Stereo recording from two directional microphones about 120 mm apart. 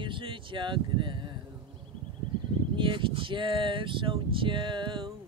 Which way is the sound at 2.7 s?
45° right (ahead or behind).